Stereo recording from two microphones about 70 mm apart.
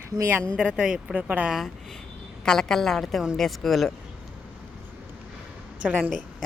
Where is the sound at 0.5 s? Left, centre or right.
Centre.